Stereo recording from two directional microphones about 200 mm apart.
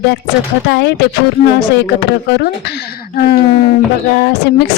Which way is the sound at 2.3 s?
55° left (ahead or behind).